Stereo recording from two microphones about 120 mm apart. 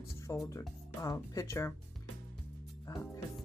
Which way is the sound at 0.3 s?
25° left (ahead or behind).